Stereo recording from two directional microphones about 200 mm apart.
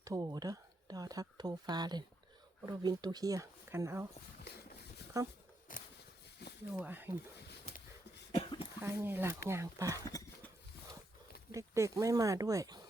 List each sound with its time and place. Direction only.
0.0 s speech: 15° right (ahead or behind)
5.2 s speech: 15° right (ahead or behind)
5.7 s a sound: 45° left (ahead or behind)
6.4 s a sound: 55° left (ahead or behind)
6.7 s speech: 10° right (ahead or behind)
8.4 s cough: 25° left (ahead or behind)
8.8 s speech: 10° right (ahead or behind)
10.0 s a sound: 15° left (ahead or behind)
11.5 s speech: 15° right (ahead or behind)